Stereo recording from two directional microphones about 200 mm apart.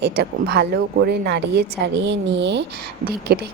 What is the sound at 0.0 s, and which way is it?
A woman's voice, 55° right (ahead or behind).